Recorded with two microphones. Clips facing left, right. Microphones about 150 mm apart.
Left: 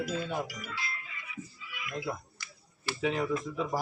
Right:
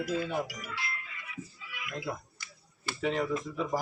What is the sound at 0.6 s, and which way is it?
Speech, 65° right (ahead or behind).